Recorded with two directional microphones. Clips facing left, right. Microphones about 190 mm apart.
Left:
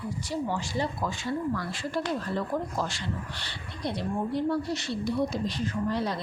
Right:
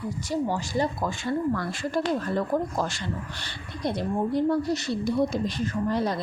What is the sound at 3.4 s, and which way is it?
A woman's voice, 45° right (ahead or behind).